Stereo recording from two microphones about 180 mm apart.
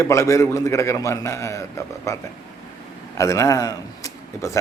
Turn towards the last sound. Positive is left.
turn(degrees=20)  # may be behind; listen again after turning